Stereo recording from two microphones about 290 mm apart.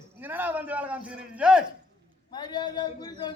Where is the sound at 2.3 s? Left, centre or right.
Centre.